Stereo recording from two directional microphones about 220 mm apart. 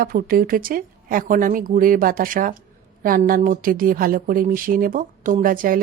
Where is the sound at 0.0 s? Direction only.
40° right (ahead or behind).